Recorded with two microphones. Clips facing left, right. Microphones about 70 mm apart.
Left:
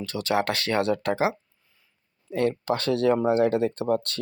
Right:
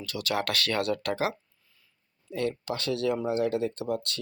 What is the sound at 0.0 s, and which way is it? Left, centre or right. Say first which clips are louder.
Speech: left 5 dB; left.